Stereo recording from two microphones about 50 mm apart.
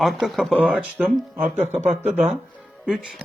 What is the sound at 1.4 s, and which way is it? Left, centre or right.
Speech, right.